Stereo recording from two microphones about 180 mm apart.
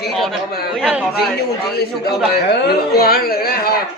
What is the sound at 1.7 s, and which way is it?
Speech, 60° left (ahead or behind).